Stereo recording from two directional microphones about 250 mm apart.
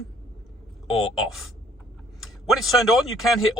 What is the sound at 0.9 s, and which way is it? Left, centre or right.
Speech, left.